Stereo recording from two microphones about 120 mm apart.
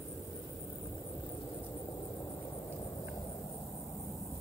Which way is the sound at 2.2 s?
20° left (ahead or behind).